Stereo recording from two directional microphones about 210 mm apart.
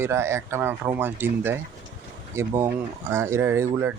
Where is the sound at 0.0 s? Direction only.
10° right (ahead or behind).